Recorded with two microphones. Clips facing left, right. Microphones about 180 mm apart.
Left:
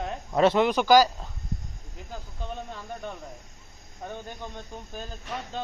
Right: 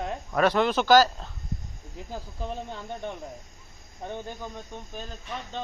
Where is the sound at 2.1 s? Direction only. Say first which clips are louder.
Right 3 dB; 35° right (ahead or behind).